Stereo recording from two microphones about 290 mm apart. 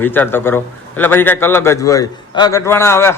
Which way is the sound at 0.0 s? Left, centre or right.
Centre.